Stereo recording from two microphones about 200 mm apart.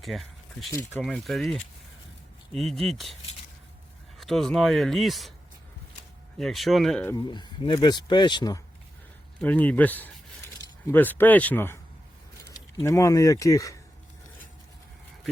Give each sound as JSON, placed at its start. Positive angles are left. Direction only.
{"t": 0.0, "sound": "speech", "side_deg": 0}
{"t": 4.2, "sound": "speech", "side_deg": 0}
{"t": 6.4, "sound": "speech", "side_deg": 0}
{"t": 7.3, "sound": "speech", "side_deg": 20}
{"t": 9.4, "sound": "speech", "side_deg": 10}